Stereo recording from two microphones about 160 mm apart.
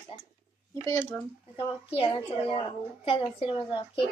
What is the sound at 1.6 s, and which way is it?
A woman's voice, 35° left (ahead or behind).